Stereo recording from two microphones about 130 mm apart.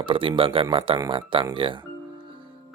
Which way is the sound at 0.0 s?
40° right (ahead or behind).